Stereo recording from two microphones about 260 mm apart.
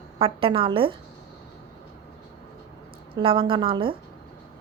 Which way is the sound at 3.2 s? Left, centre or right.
Centre.